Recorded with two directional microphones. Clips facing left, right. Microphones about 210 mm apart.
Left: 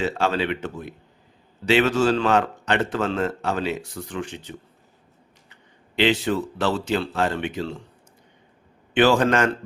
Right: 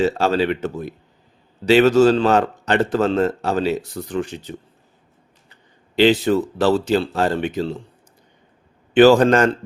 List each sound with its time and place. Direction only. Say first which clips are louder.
0.0 s a man's voice: right 5 dB; 40° right (ahead or behind)
6.0 s a man's voice: right 6 dB; 40° right (ahead or behind)
9.0 s a man's voice: right 6 dB; 40° right (ahead or behind)